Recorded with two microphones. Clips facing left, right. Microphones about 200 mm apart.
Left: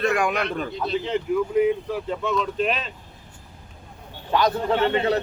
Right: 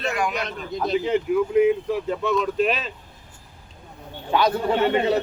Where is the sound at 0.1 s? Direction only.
55° left (ahead or behind).